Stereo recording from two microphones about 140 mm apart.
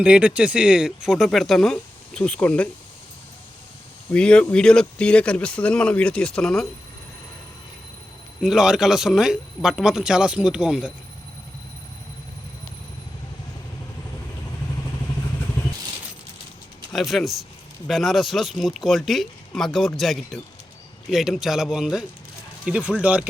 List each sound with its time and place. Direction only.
0.0 s speech: 10° right (ahead or behind); by 2.6 s 10° left (ahead or behind)
4.1 s speech: 10° left (ahead or behind)
8.4 s speech: 5° right (ahead or behind)
16.9 s speech: centre (ahead or behind)